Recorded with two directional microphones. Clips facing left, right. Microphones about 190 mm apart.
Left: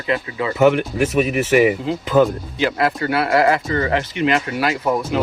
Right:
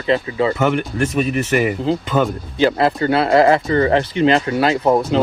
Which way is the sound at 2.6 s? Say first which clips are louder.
Right 4 dB; 30° right (ahead or behind).